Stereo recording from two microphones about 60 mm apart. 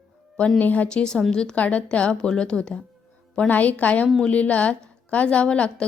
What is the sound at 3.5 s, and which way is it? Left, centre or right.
A woman's voice, left.